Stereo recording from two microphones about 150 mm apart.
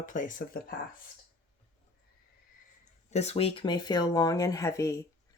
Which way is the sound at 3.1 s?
45° left (ahead or behind).